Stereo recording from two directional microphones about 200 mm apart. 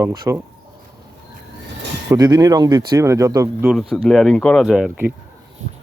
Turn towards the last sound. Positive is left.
turn(degrees=-5)  # may be behind; listen again after turning